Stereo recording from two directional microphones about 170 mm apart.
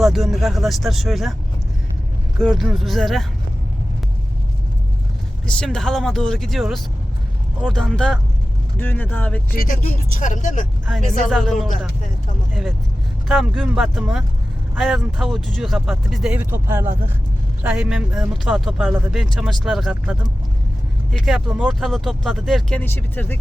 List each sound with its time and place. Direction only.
0.0 s speech: centre (ahead or behind)
2.4 s speech: centre (ahead or behind)
5.5 s speech: 5° left (ahead or behind)
9.6 s speech: 55° left (ahead or behind)
11.3 s speech: centre (ahead or behind)
13.2 s speech: centre (ahead or behind)